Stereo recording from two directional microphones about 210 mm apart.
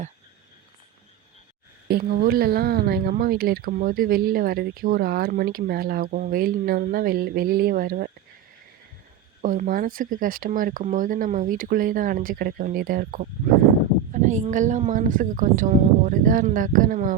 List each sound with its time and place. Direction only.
1.9 s speech: 45° right (ahead or behind)
9.4 s speech: 40° right (ahead or behind)
14.1 s a sound: 35° right (ahead or behind)
14.5 s speech: 35° right (ahead or behind)